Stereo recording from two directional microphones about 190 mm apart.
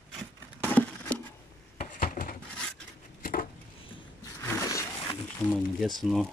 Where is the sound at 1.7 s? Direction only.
45° left (ahead or behind).